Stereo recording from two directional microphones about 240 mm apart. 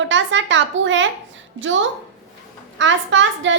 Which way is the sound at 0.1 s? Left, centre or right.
Right.